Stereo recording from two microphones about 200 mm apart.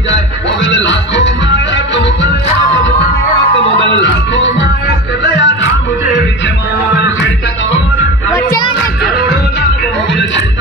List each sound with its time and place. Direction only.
0.7 s music: 65° left (ahead or behind)
4.0 s music: 65° left (ahead or behind)
6.9 s music: 60° left (ahead or behind)
8.5 s music: 20° left (ahead or behind)